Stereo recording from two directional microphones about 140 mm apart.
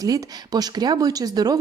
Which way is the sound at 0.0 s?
25° right (ahead or behind).